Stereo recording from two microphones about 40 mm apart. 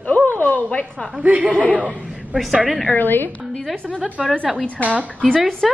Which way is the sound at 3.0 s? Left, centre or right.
Left.